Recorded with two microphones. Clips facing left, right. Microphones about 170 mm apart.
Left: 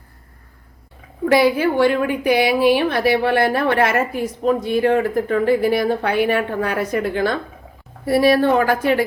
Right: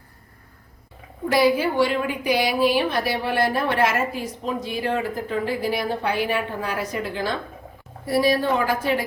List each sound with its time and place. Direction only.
1.2 s a woman's voice: 60° left (ahead or behind)